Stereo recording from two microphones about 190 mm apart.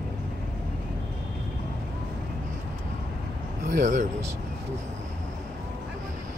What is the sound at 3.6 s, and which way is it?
Speech, 45° right (ahead or behind).